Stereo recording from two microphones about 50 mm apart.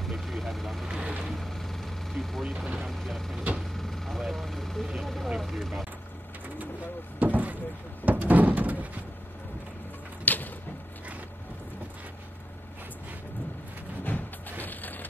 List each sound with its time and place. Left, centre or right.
0.0 s vehicle: centre
0.9 s vehicle: right
1.2 s vehicle: centre
2.4 s speech: centre
2.9 s speech: centre
3.7 s vehicle: centre
5.0 s speech: centre
7.2 s vehicle: right
8.0 s door: right
10.2 s a sound: left
14.1 s music: left
14.6 s a sound: left